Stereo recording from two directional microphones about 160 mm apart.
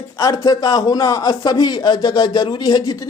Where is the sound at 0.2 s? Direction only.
25° left (ahead or behind).